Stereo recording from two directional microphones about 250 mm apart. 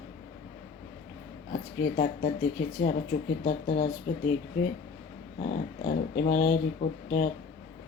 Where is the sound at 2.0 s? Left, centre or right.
Left.